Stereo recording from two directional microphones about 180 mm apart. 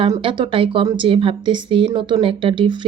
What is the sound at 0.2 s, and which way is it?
Speech, 30° right (ahead or behind).